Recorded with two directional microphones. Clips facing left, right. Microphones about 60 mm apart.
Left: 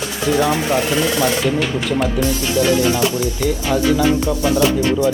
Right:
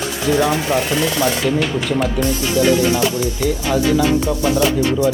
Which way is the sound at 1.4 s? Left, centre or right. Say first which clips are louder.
Even; centre.